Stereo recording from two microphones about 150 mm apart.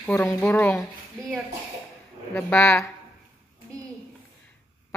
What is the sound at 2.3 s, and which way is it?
Speech, 10° left (ahead or behind).